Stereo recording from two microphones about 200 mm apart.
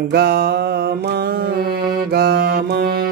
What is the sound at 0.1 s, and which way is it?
Mantra, 50° right (ahead or behind).